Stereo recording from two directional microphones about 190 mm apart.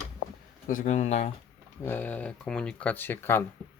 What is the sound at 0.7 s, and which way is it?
Speech, 40° left (ahead or behind).